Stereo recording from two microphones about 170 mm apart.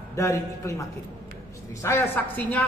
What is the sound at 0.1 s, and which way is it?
Speech, 15° left (ahead or behind).